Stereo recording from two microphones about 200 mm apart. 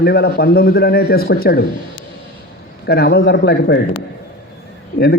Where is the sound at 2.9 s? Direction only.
55° left (ahead or behind).